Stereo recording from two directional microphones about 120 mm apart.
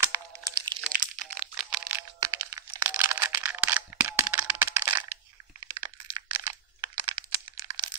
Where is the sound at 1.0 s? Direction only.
40° right (ahead or behind).